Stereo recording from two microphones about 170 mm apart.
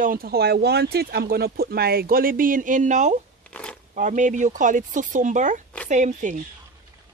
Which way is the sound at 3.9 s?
45° right (ahead or behind).